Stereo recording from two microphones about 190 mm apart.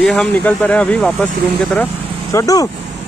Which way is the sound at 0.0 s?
5° left (ahead or behind).